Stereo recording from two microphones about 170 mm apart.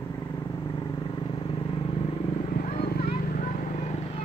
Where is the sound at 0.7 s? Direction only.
25° left (ahead or behind).